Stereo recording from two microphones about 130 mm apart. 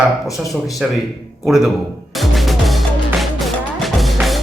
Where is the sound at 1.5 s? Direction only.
Centre (ahead or behind).